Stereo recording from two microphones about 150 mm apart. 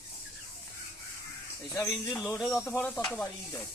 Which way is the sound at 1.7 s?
10° left (ahead or behind).